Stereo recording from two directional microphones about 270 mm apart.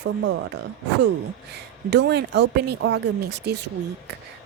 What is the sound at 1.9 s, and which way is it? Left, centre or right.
Speech, right.